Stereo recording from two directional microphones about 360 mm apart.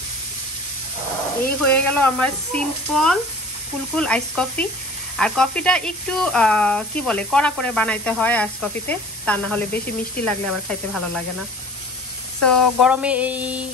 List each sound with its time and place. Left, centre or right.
1.7 s speech: centre
12.4 s speech: centre